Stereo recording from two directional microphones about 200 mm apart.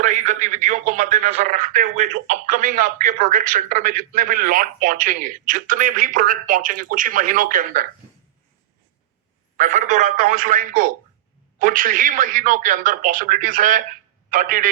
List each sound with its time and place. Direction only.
0.0 s a man's voice: 40° right (ahead or behind)
9.6 s a man's voice: 40° right (ahead or behind)